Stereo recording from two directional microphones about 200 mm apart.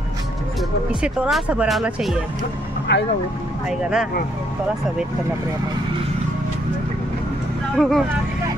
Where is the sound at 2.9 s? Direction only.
60° left (ahead or behind).